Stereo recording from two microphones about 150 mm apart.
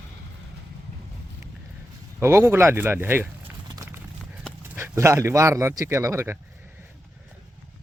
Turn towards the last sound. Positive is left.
turn(degrees=-20)  # may be behind; listen again after turning